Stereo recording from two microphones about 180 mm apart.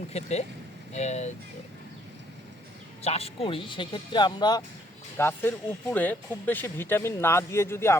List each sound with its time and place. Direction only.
0.1 s speech: 35° left (ahead or behind)
3.0 s speech: 35° left (ahead or behind)
5.1 s speech: 10° left (ahead or behind)